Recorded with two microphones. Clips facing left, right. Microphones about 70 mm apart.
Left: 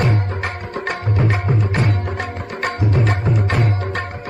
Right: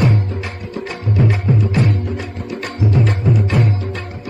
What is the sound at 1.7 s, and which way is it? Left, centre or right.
Music, left.